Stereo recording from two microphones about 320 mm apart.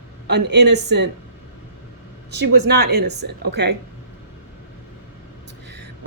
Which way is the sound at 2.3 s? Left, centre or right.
Right.